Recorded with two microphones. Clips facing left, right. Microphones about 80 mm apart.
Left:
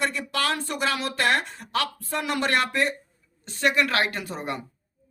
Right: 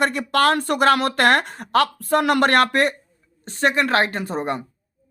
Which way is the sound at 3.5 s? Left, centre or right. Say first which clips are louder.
Right 4 dB; right.